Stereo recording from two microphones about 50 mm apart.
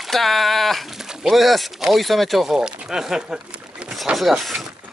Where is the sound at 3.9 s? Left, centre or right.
Centre.